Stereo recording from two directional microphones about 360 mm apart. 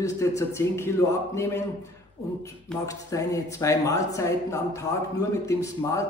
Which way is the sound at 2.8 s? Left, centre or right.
Centre.